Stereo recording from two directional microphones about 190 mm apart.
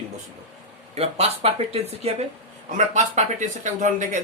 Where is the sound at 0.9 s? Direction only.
30° right (ahead or behind).